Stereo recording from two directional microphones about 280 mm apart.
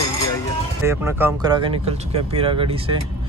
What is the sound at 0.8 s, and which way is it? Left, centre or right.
Speech, centre.